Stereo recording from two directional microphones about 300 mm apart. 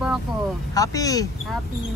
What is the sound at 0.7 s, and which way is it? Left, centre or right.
Speech, centre.